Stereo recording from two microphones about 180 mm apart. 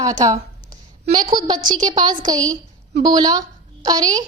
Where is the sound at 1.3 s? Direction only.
25° right (ahead or behind).